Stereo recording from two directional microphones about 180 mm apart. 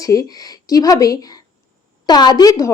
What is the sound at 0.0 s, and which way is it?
A woman's voice, 20° left (ahead or behind).